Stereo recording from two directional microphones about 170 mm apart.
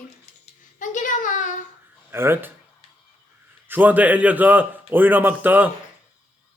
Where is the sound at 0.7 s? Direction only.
50° left (ahead or behind).